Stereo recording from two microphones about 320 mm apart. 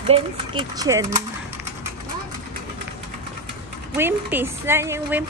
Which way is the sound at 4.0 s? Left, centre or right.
Centre.